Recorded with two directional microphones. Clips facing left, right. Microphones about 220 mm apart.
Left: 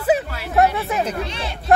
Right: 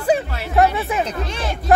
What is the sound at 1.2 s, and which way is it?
Speech, 45° right (ahead or behind).